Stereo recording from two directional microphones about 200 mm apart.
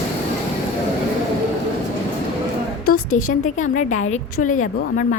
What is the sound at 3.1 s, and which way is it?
A woman's voice, 40° left (ahead or behind).